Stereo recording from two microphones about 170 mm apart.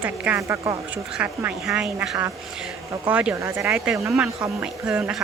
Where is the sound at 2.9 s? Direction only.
10° right (ahead or behind).